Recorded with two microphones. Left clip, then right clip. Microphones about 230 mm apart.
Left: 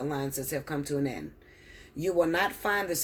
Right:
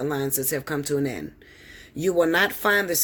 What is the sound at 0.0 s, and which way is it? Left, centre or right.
Speech, right.